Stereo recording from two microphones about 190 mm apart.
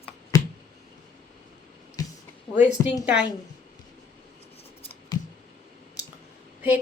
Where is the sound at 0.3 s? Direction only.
15° left (ahead or behind).